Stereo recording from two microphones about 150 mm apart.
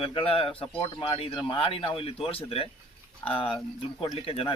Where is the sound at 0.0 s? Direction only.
40° left (ahead or behind).